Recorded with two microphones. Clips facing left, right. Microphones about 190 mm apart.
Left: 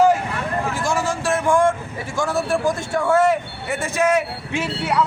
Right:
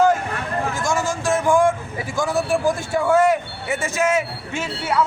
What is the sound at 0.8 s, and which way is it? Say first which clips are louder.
Vehicle: even; 5° left (ahead or behind).